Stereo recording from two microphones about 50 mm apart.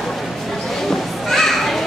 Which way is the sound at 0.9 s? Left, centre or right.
Centre.